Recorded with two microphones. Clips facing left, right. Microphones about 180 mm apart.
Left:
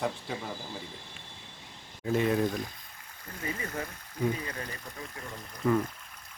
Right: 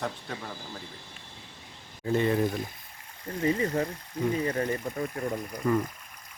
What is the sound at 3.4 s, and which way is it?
Speech, 30° right (ahead or behind).